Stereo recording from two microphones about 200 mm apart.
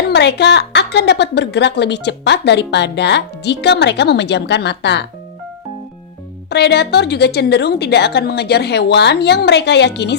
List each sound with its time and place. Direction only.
0.1 s a woman's voice: 55° left (ahead or behind)
6.5 s a woman's voice: 55° left (ahead or behind)